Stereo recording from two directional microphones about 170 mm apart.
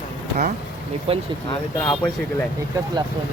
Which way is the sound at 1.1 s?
35° right (ahead or behind).